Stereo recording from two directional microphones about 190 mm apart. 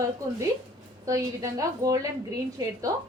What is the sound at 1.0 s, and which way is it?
A woman's voice, 15° right (ahead or behind).